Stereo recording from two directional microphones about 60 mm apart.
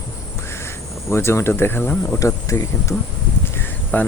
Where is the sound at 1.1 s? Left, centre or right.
Left.